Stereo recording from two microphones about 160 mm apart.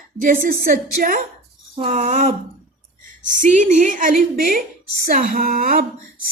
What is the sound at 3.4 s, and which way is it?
A woman's voice, 50° right (ahead or behind).